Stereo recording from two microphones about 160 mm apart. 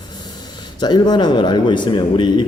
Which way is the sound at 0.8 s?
25° left (ahead or behind).